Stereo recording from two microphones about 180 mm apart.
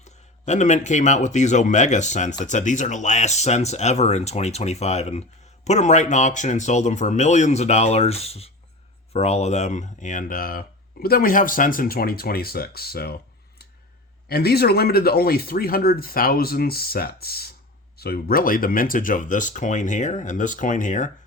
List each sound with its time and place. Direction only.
0.0 s speech: 40° left (ahead or behind); by 13.1 s 60° left (ahead or behind)
14.3 s speech: 60° left (ahead or behind)